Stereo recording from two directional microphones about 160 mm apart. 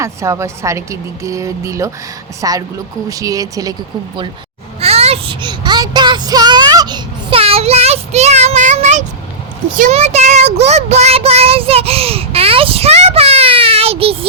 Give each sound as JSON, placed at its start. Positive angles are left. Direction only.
{"t": 0.0, "sound": "speech", "side_deg": -20}
{"t": 4.8, "sound": "child singing", "side_deg": -40}